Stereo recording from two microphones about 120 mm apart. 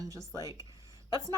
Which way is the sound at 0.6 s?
30° left (ahead or behind).